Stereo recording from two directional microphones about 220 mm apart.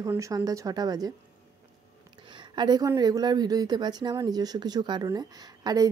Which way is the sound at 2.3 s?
20° right (ahead or behind).